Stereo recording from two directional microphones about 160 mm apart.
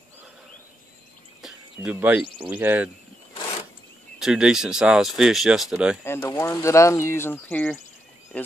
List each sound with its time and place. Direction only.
1.4 s a sound: 10° right (ahead or behind)
2.4 s speech: 10° right (ahead or behind)
4.2 s speech: 5° right (ahead or behind)
6.0 s speech: 15° left (ahead or behind)